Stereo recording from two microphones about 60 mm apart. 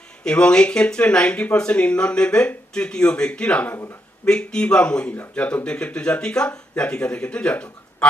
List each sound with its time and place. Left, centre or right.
0.3 s speech: centre